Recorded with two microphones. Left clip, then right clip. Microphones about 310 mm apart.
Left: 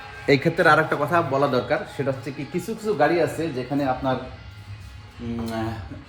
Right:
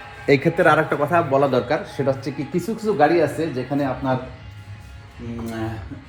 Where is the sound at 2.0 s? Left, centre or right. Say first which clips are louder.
Right 4 dB; centre.